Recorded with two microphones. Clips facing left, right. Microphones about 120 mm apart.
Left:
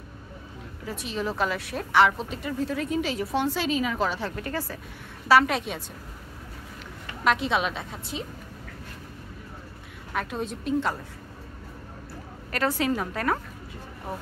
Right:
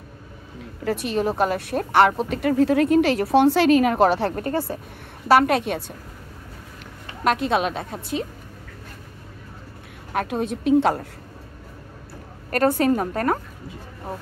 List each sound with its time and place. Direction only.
0.8 s speech: 65° right (ahead or behind)
4.4 s speech: 30° right (ahead or behind)
5.3 s speech: 55° right (ahead or behind)
7.2 s a woman's voice: 45° right (ahead or behind)
10.1 s speech: 60° right (ahead or behind)
12.4 s a woman's voice: 50° right (ahead or behind)